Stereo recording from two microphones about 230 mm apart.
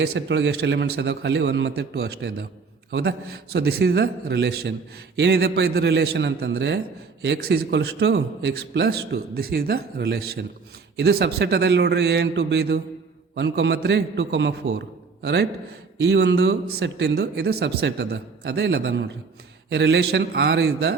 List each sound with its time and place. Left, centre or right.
0.0 s a man's voice: right